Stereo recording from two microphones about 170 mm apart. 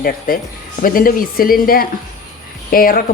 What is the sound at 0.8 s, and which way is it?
Speech, 55° left (ahead or behind).